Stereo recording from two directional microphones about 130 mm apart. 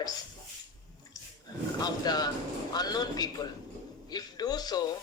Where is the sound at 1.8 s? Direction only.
30° left (ahead or behind).